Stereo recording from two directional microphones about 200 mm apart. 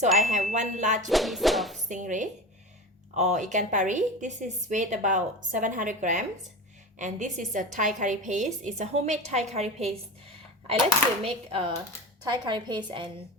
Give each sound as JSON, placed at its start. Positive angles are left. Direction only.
{"t": 0.2, "sound": "a woman's voice", "side_deg": -35}
{"t": 1.0, "sound": "music", "side_deg": 0}
{"t": 1.9, "sound": "a woman's voice", "side_deg": -40}
{"t": 11.2, "sound": "a woman's voice", "side_deg": -30}